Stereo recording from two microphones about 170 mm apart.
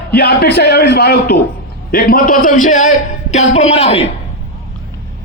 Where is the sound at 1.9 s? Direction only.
55° left (ahead or behind); by 4.0 s 35° left (ahead or behind).